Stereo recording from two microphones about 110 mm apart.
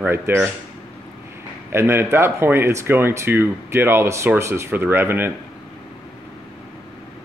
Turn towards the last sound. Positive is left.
turn(degrees=-20)  # may be behind; listen again after turning